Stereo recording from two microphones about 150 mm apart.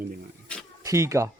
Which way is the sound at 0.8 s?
20° right (ahead or behind).